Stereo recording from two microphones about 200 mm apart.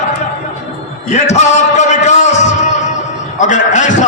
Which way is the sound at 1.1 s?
35° left (ahead or behind).